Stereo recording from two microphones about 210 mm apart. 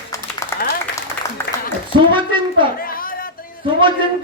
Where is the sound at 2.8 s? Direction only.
45° left (ahead or behind).